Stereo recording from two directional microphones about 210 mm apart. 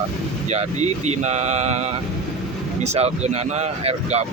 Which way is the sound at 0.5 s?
30° right (ahead or behind).